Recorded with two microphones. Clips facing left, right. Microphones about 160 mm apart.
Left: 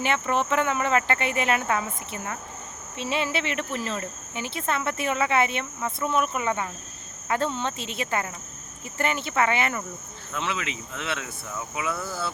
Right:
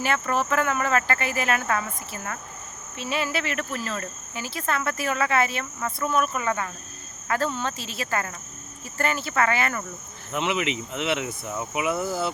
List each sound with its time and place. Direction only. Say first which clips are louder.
0.0 s cricket: even; 20° left (ahead or behind)
10.3 s speech: right 5 dB; 20° right (ahead or behind)